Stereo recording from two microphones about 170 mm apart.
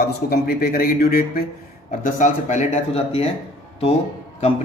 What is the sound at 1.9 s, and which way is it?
Speech, 50° left (ahead or behind).